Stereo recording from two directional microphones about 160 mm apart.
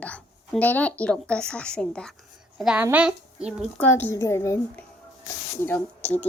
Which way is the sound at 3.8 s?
10° left (ahead or behind).